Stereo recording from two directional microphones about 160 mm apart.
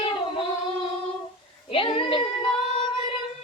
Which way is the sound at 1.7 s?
35° left (ahead or behind).